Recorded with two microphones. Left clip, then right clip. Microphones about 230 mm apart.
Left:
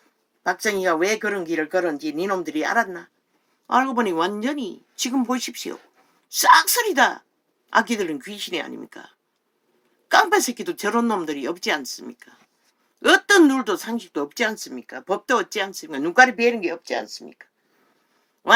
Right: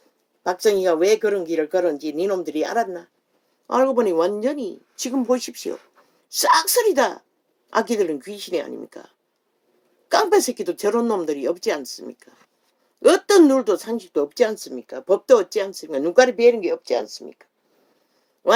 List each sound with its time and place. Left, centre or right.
0.4 s speech: left